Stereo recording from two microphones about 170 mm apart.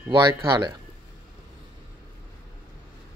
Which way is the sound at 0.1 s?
25° right (ahead or behind).